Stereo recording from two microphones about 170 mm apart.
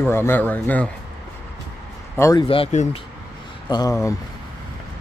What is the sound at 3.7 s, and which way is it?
Speech, 20° left (ahead or behind).